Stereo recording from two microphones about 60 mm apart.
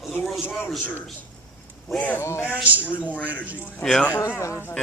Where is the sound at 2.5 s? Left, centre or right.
Right.